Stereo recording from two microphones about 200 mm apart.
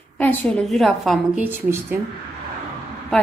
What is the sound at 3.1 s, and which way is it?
Speech, centre (ahead or behind).